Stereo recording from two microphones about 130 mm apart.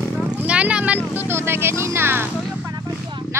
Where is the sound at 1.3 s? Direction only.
20° right (ahead or behind).